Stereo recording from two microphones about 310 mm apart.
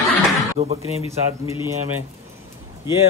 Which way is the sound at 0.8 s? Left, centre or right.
Centre.